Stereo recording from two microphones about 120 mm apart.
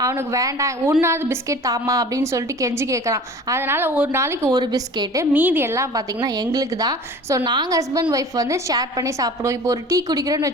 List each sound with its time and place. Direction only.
0.0 s a woman's voice: 25° right (ahead or behind)
4.2 s a woman's voice: 25° right (ahead or behind)
4.6 s a woman's voice: 35° right (ahead or behind)
5.3 s a woman's voice: 15° right (ahead or behind)